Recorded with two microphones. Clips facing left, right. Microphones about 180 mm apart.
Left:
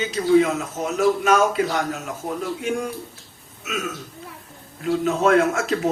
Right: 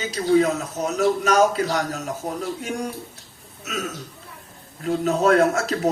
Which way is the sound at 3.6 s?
40° right (ahead or behind).